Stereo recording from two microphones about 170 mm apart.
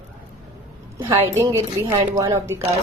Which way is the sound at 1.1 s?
15° right (ahead or behind).